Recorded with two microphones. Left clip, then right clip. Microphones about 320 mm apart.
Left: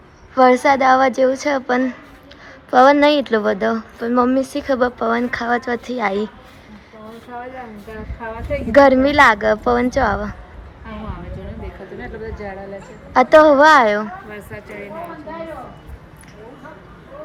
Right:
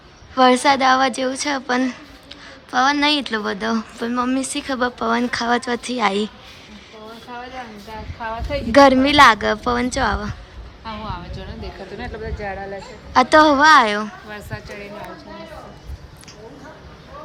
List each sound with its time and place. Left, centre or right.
0.3 s speech: centre
8.7 s speech: centre
11.9 s a sound: right
13.1 s speech: centre